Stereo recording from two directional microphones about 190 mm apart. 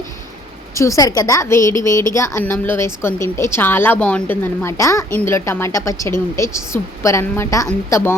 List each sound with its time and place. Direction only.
0.8 s a woman's voice: 15° left (ahead or behind)